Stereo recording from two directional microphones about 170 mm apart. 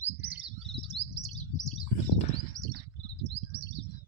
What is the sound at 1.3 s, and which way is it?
Bird, 45° left (ahead or behind).